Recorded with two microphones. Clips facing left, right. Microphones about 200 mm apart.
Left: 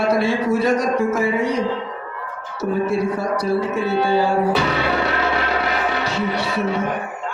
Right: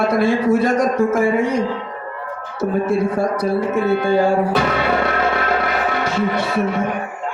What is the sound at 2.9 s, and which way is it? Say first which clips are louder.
Speech: right 3 dB; 50° right (ahead or behind).